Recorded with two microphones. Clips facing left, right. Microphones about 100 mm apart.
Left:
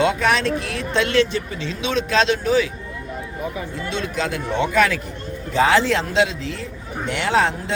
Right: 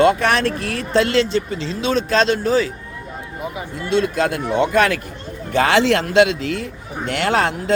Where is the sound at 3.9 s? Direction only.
50° right (ahead or behind).